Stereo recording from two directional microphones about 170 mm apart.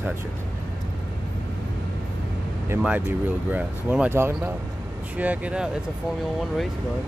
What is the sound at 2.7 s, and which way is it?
Speech, 10° right (ahead or behind).